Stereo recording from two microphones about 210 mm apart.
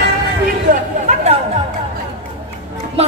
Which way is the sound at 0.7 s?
40° right (ahead or behind).